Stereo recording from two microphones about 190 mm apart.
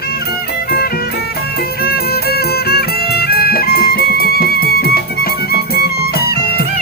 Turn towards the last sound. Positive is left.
turn(degrees=55)  # may be behind; listen again after turning